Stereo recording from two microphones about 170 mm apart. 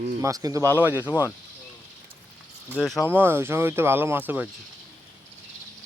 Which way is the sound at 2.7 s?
5° left (ahead or behind).